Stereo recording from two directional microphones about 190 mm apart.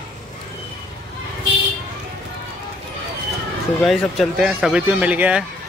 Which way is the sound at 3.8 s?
Centre (ahead or behind).